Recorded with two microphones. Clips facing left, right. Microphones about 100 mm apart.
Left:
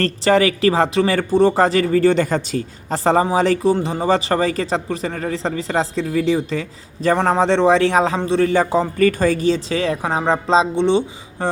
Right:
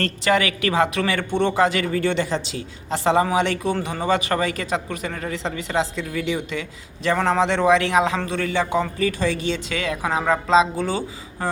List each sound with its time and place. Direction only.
0.0 s speech: 35° left (ahead or behind)
9.0 s speech: 50° left (ahead or behind); by 11.4 s 25° left (ahead or behind)